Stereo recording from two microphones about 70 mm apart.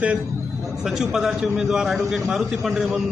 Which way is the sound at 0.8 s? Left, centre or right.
Centre.